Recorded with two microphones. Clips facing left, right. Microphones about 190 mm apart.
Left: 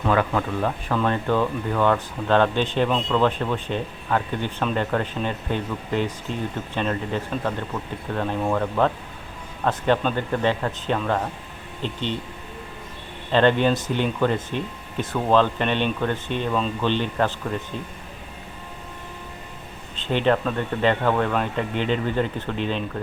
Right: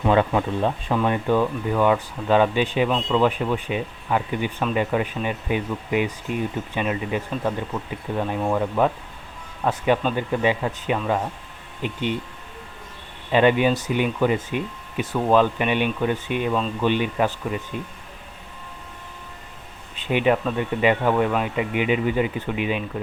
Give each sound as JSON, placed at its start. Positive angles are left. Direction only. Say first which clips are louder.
{"t": 0.0, "sound": "speech", "louder": "right 2 dB", "side_deg": -20}
{"t": 13.3, "sound": "speech", "louder": "right 1 dB", "side_deg": -10}
{"t": 20.0, "sound": "speech", "louder": "right 1 dB", "side_deg": -10}